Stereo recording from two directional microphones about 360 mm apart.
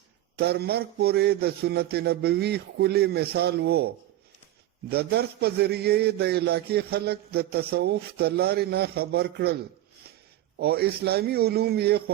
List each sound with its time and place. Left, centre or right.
0.3 s a man's voice: right
10.6 s a man's voice: right